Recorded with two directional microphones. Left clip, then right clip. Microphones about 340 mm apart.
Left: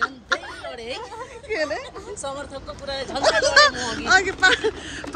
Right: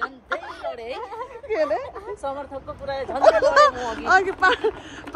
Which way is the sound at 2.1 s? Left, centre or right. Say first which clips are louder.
Right 1 dB; right.